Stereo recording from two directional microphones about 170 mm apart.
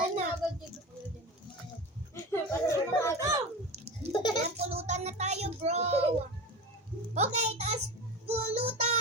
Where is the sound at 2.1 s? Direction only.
15° left (ahead or behind).